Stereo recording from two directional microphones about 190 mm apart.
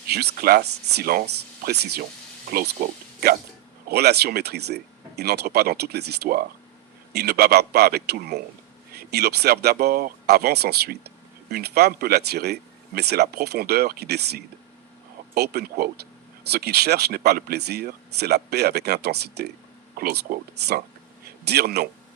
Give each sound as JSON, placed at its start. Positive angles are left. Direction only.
{"t": 0.1, "sound": "speech", "side_deg": -55}